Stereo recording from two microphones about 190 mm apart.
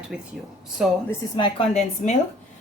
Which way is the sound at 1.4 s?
30° left (ahead or behind).